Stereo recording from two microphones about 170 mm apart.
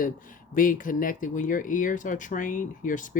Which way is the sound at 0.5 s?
55° left (ahead or behind).